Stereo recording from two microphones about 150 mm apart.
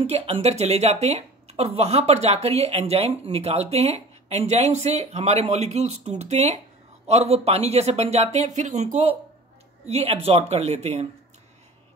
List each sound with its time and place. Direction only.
0.0 s speech: 40° right (ahead or behind)
9.8 s speech: 40° right (ahead or behind)